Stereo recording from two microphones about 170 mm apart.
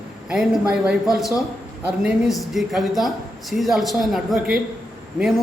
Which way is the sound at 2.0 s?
Centre (ahead or behind).